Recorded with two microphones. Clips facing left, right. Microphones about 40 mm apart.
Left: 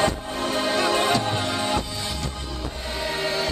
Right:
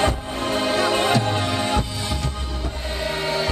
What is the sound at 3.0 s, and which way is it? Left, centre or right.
Music, centre.